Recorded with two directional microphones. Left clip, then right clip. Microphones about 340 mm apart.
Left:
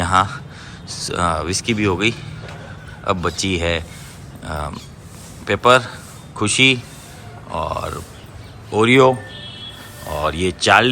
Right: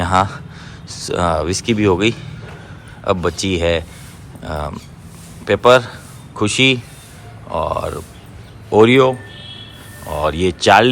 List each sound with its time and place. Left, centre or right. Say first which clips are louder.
0.0 s a man's voice: right 1 dB; centre
10.1 s speech: right 3 dB; centre